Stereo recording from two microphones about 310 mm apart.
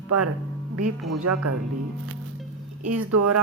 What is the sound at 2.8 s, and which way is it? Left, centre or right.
Speech, right.